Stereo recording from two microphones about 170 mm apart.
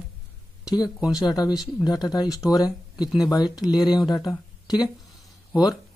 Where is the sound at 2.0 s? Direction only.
20° left (ahead or behind).